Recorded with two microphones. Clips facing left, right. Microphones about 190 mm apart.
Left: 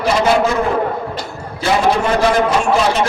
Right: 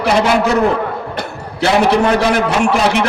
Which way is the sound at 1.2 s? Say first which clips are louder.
Right 5 dB; 70° right (ahead or behind).